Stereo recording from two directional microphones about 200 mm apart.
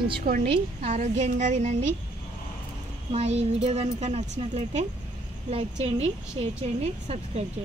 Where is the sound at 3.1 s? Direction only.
35° right (ahead or behind).